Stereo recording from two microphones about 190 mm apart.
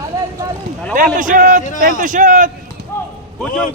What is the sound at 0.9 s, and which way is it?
A man's voice, 45° right (ahead or behind).